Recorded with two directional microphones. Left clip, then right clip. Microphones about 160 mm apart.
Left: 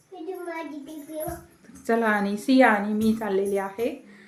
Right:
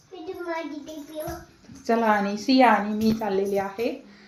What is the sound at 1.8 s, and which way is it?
A woman's voice, 15° left (ahead or behind).